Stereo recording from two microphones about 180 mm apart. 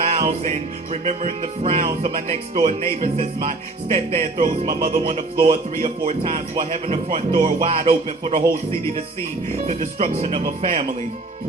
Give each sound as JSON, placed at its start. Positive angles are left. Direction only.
{"t": 0.0, "sound": "music", "side_deg": -40}
{"t": 1.0, "sound": "speech", "side_deg": -40}
{"t": 9.5, "sound": "speech", "side_deg": -45}